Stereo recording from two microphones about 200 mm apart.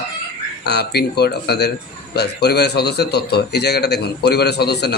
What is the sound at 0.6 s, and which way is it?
A man's voice, 55° left (ahead or behind).